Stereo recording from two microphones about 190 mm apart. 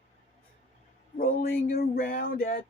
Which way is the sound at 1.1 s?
50° left (ahead or behind).